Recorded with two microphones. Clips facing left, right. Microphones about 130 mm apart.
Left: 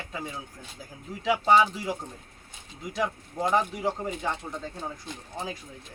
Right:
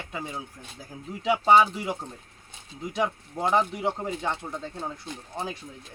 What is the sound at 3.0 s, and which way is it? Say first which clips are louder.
Speech: right 1 dB; 25° right (ahead or behind).